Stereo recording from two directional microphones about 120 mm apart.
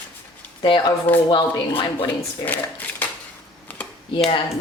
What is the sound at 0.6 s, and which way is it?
Speech, 45° left (ahead or behind).